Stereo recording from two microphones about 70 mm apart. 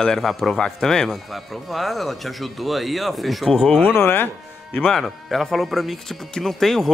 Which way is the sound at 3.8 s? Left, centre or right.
Left.